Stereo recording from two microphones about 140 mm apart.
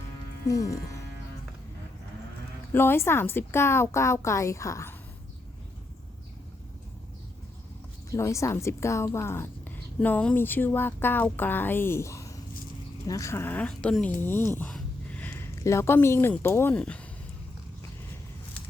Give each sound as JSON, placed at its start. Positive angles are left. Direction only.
{"t": 0.4, "sound": "a woman's voice", "side_deg": 25}
{"t": 2.7, "sound": "a woman's voice", "side_deg": 15}
{"t": 8.1, "sound": "a woman's voice", "side_deg": 20}